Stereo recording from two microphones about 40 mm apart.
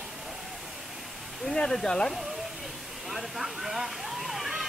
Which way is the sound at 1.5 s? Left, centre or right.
Centre.